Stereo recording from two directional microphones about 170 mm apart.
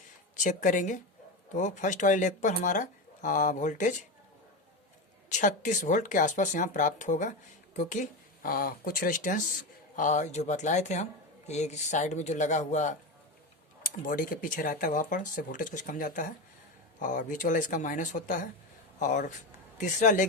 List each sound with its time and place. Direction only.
0.3 s speech: 50° left (ahead or behind)
5.3 s speech: 50° left (ahead or behind)
13.8 s speech: 55° left (ahead or behind)